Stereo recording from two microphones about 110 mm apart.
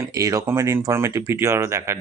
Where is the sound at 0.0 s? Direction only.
30° right (ahead or behind).